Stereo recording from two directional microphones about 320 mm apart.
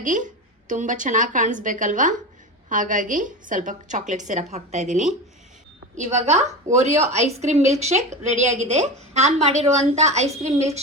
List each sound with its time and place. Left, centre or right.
0.0 s a woman's voice: right